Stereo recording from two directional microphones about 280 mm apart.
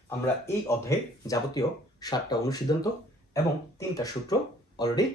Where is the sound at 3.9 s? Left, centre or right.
Centre.